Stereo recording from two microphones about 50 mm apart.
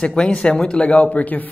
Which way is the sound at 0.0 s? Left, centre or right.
Centre.